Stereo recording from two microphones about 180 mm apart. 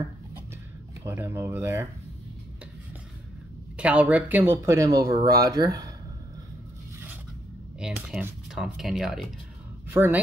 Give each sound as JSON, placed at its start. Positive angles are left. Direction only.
{"t": 1.0, "sound": "speech", "side_deg": -10}
{"t": 3.7, "sound": "speech", "side_deg": -5}
{"t": 7.8, "sound": "speech", "side_deg": -5}
{"t": 9.8, "sound": "speech", "side_deg": -10}